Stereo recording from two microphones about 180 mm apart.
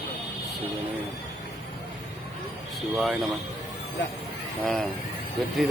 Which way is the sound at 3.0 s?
Centre (ahead or behind).